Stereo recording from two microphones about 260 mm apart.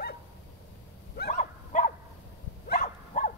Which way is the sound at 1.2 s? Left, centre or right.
Left.